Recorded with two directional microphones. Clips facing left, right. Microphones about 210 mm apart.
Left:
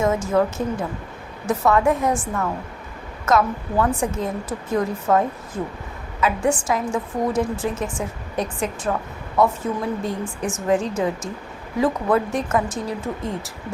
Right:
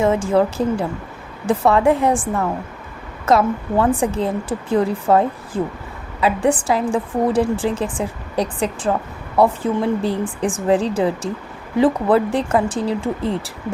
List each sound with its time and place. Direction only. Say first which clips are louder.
0.0 s a woman's voice: right 3 dB; 30° right (ahead or behind)